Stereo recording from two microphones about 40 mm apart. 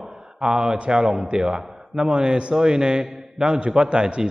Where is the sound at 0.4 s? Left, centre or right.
Centre.